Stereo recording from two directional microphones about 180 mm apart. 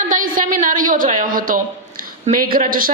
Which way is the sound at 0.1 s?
45° right (ahead or behind).